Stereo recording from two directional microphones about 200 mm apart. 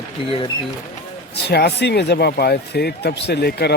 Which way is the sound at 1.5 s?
55° left (ahead or behind).